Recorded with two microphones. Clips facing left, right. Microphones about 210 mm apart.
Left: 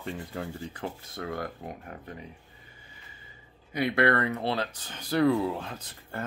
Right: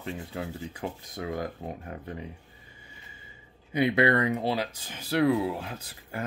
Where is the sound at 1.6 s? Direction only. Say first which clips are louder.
Right 3 dB; 30° right (ahead or behind).